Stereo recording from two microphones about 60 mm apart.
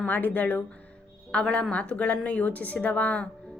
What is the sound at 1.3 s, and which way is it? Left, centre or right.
A woman's voice, centre.